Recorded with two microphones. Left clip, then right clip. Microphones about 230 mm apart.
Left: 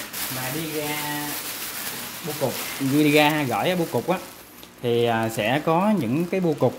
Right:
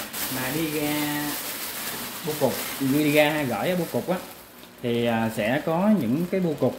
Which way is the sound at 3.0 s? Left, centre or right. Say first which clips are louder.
Left 3 dB; left.